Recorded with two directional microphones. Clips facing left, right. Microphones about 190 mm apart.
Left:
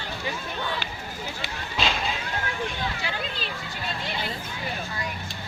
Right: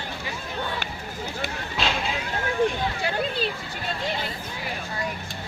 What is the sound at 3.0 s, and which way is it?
Speech, 50° right (ahead or behind).